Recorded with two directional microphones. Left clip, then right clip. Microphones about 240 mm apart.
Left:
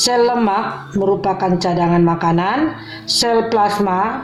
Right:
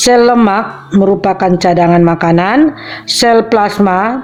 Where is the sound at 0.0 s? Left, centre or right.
Right.